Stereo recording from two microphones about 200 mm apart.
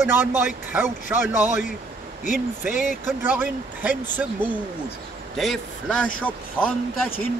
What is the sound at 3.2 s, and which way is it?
Speech, 10° right (ahead or behind).